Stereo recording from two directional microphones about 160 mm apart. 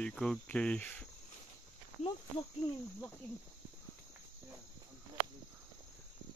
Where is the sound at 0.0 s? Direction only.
5° left (ahead or behind).